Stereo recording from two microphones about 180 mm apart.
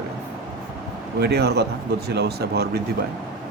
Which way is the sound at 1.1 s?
65° right (ahead or behind).